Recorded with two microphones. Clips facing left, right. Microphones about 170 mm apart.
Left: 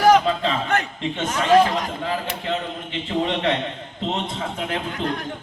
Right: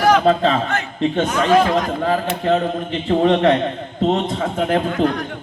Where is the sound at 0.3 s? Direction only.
40° right (ahead or behind).